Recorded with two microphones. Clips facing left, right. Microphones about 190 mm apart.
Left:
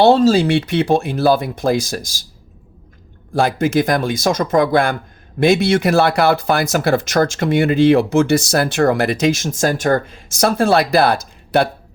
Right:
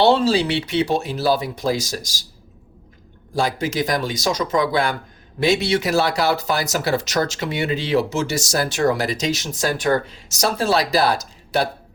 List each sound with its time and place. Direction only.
0.0 s speech: 45° left (ahead or behind)
3.3 s speech: 55° left (ahead or behind)